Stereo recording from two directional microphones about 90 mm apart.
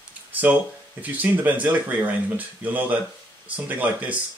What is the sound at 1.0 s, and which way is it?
Speech, 20° right (ahead or behind).